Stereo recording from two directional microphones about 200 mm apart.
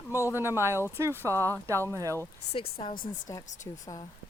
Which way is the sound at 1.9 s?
15° right (ahead or behind).